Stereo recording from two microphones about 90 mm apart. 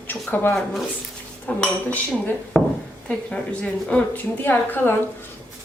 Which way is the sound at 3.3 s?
10° left (ahead or behind).